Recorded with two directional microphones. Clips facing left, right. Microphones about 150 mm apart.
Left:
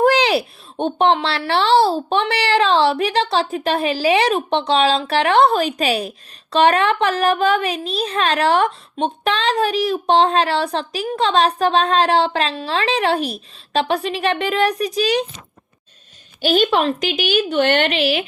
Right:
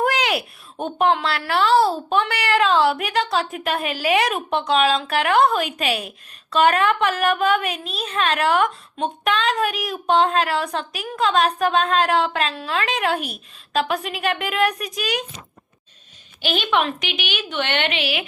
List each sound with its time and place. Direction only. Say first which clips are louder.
0.0 s speech: left 6 dB; 30° left (ahead or behind)
16.4 s speech: left 5 dB; 40° left (ahead or behind)